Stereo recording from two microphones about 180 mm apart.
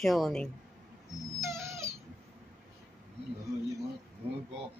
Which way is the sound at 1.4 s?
15° right (ahead or behind).